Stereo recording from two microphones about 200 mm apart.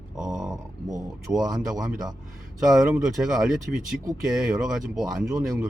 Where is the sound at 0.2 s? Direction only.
Centre (ahead or behind).